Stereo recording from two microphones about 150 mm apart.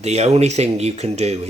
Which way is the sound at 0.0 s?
45° right (ahead or behind).